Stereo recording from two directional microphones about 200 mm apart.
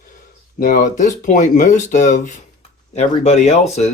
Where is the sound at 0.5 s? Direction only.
40° left (ahead or behind).